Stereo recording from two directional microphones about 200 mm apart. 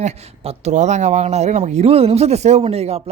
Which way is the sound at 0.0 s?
35° right (ahead or behind).